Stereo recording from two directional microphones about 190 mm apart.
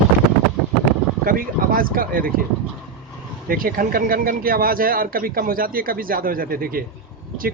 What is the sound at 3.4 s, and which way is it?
Speech, 50° right (ahead or behind).